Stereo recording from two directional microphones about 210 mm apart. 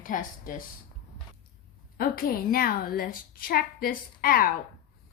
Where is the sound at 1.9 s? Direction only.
45° left (ahead or behind).